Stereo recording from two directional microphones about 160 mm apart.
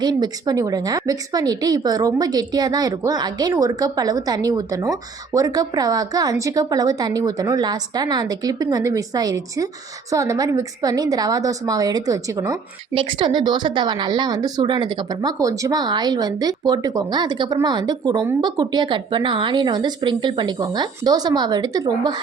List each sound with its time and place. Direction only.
0.0 s a woman's voice: 25° right (ahead or behind)
12.9 s a woman's voice: 35° right (ahead or behind)